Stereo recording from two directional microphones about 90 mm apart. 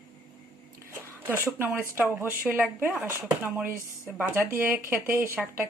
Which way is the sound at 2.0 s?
25° right (ahead or behind).